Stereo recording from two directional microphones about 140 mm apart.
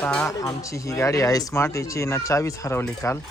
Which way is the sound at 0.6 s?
20° left (ahead or behind).